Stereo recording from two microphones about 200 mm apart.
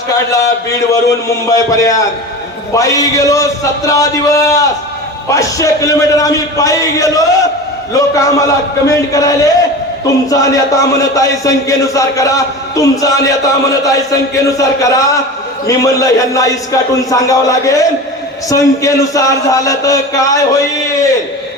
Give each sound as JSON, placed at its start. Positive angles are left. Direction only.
{"t": 1.5, "sound": "a man's voice", "side_deg": 15}